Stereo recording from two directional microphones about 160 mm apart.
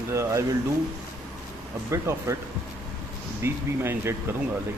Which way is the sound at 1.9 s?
20° right (ahead or behind).